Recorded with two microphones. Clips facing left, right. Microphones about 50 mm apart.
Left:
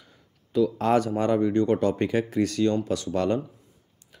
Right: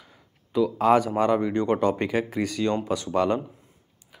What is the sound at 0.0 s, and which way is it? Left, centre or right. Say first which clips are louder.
Speech: right 2 dB; centre.